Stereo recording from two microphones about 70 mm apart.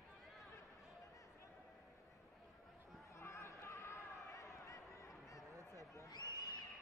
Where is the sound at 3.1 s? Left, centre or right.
Left.